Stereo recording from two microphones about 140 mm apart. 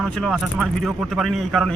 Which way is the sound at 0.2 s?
Centre (ahead or behind).